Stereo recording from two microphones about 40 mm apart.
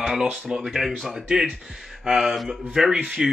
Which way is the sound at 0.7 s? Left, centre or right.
Centre.